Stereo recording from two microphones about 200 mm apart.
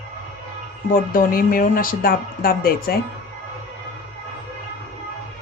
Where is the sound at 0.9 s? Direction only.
45° left (ahead or behind).